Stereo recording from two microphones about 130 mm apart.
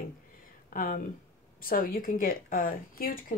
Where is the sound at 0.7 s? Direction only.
90° left.